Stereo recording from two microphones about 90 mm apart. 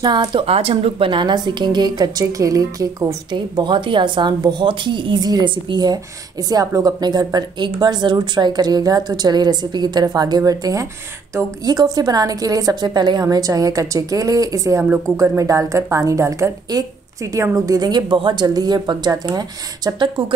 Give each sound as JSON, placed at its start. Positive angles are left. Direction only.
{"t": 0.0, "sound": "a woman's voice", "side_deg": -50}
{"t": 0.5, "sound": "a woman's voice", "side_deg": -90}
{"t": 3.3, "sound": "a woman's voice", "side_deg": -55}
{"t": 6.5, "sound": "a woman's voice", "side_deg": -40}
{"t": 20.0, "sound": "a woman's voice", "side_deg": -65}